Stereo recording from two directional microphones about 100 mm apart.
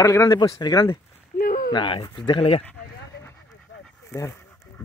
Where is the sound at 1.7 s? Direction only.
55° left (ahead or behind).